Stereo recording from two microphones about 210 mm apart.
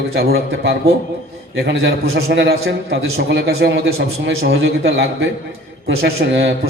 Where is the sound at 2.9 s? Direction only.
60° right (ahead or behind).